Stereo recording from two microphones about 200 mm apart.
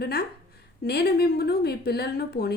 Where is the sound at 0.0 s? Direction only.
55° left (ahead or behind).